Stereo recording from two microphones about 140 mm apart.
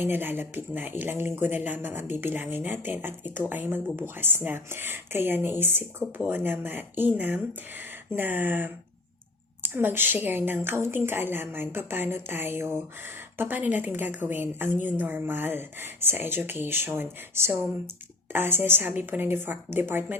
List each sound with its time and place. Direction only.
0.0 s a woman's voice: 15° right (ahead or behind)